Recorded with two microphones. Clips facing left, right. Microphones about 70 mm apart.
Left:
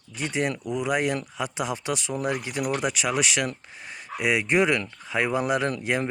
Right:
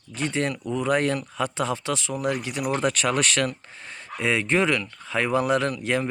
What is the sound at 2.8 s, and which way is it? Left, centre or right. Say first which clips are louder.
Speech: right 2 dB; centre.